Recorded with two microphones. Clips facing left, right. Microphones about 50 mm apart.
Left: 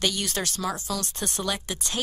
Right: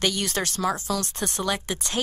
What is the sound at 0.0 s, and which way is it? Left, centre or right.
Speech, right.